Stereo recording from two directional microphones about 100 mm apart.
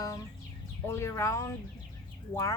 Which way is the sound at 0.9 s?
30° left (ahead or behind).